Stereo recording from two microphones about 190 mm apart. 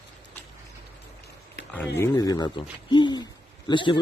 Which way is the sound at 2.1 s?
20° left (ahead or behind).